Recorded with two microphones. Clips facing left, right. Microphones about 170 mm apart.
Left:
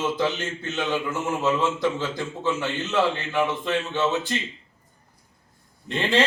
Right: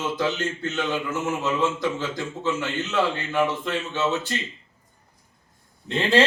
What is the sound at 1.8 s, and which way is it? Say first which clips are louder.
A man's voice: left 1 dB; 15° left (ahead or behind).